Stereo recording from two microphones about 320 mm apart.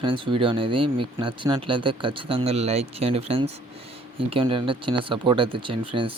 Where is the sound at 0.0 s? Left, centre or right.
Centre.